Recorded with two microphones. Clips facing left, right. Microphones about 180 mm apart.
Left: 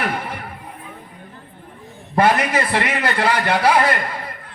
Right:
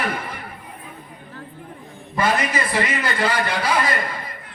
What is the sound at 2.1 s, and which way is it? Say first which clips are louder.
A man's voice: left 5 dB; 65° left (ahead or behind).